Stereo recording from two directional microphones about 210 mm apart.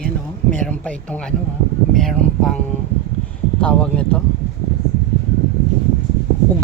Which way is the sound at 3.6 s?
5° left (ahead or behind).